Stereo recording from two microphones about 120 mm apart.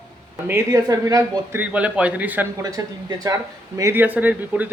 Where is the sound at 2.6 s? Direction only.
30° right (ahead or behind).